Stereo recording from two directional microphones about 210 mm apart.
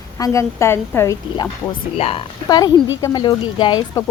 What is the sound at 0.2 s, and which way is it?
Speech, 15° left (ahead or behind).